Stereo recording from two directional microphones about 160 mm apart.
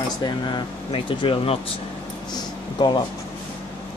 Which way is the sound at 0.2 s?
30° left (ahead or behind).